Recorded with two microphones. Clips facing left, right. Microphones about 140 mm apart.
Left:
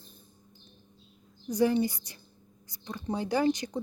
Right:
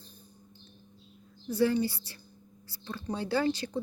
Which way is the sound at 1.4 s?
15° left (ahead or behind).